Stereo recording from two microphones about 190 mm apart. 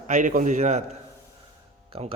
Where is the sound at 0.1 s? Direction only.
45° right (ahead or behind).